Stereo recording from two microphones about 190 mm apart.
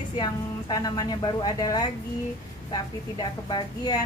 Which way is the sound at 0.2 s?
20° left (ahead or behind).